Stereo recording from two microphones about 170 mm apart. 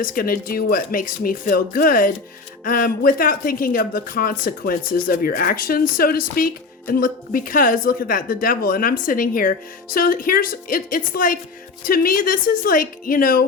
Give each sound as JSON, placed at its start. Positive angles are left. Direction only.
{"t": 0.0, "sound": "speech", "side_deg": 55}